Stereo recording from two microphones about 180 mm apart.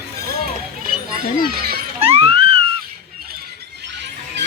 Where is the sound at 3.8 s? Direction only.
75° right (ahead or behind).